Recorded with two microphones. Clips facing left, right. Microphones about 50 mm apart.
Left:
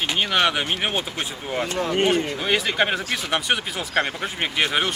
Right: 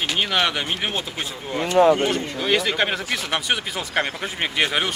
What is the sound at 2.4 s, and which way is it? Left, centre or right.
Speech, centre.